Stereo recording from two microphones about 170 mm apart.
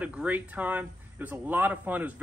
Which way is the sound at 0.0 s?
10° right (ahead or behind).